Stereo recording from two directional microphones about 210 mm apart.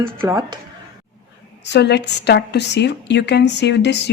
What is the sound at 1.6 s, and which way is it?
A woman's voice, 55° left (ahead or behind).